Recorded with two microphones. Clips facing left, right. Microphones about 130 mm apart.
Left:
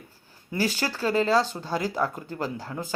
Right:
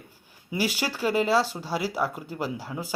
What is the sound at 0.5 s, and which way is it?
Speech, 10° right (ahead or behind).